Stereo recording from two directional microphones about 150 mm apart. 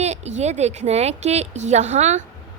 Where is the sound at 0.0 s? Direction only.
50° right (ahead or behind).